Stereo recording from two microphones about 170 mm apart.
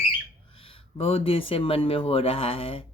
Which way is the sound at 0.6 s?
35° left (ahead or behind).